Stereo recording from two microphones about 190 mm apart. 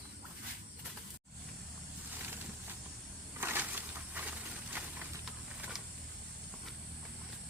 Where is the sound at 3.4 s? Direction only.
10° right (ahead or behind).